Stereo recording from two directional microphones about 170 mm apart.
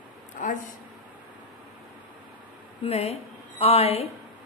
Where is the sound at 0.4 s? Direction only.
50° left (ahead or behind).